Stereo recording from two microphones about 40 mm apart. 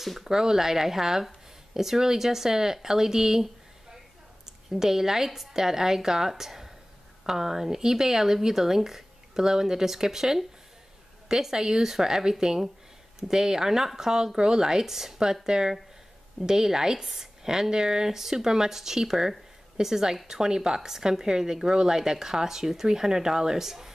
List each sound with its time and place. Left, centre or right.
0.0 s speech: centre
0.3 s speech: centre
4.5 s a woman's voice: centre